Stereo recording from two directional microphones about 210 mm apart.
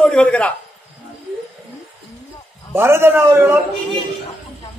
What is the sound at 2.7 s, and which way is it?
Speech, 10° right (ahead or behind).